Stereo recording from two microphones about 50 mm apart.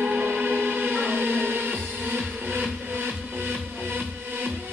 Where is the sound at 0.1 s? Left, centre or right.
Right.